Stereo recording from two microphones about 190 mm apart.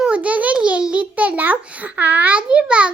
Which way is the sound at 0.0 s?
5° right (ahead or behind).